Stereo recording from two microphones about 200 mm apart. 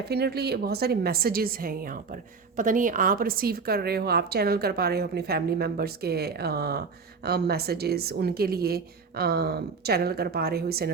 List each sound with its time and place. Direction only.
0.1 s a woman's voice: 55° right (ahead or behind)